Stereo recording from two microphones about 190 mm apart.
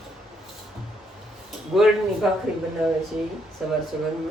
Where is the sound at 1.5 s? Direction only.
Centre (ahead or behind).